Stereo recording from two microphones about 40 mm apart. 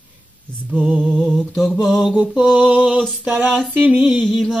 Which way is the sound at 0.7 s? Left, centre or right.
Right.